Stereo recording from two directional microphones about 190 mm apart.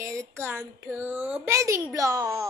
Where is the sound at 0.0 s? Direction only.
15° right (ahead or behind).